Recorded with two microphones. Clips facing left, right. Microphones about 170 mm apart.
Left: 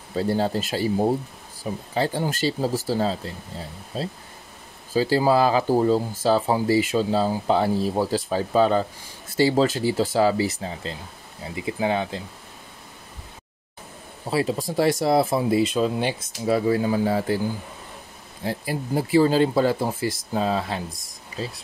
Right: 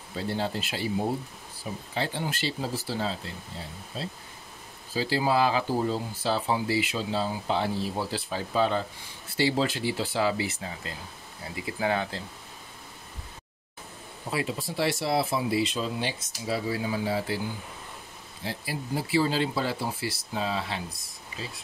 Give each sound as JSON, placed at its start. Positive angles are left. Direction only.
{"t": 0.1, "sound": "speech", "side_deg": 40}
{"t": 14.3, "sound": "speech", "side_deg": 40}
{"t": 18.4, "sound": "speech", "side_deg": 50}